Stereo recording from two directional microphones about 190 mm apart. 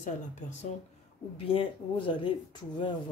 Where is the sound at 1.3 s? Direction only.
30° left (ahead or behind).